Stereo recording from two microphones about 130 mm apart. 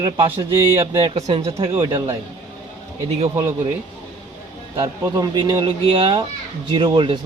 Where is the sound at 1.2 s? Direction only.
55° right (ahead or behind).